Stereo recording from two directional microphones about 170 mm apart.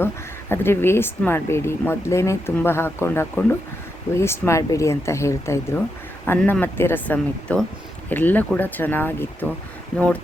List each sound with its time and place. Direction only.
0.0 s speech: 15° left (ahead or behind)